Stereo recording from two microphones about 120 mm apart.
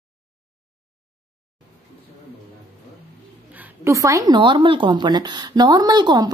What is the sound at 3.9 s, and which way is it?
Speech, 25° right (ahead or behind).